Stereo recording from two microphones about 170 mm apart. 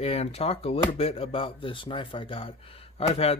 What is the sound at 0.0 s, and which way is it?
Speech, 35° left (ahead or behind).